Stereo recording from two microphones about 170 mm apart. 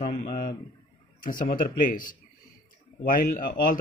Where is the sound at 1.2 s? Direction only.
55° left (ahead or behind).